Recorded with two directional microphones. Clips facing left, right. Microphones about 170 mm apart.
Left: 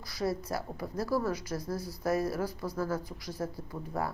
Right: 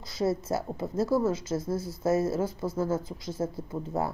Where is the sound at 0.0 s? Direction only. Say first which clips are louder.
Right 5 dB; 25° right (ahead or behind).